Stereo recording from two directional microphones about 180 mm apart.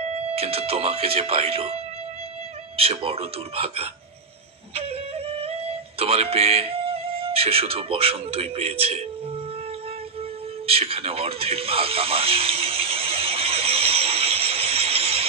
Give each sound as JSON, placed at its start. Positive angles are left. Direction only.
{"t": 0.0, "sound": "speech", "side_deg": -35}
{"t": 2.8, "sound": "speech", "side_deg": -35}
{"t": 10.7, "sound": "radio", "side_deg": -35}